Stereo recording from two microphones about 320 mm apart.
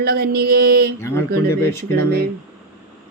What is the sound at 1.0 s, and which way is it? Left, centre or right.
Speech, centre.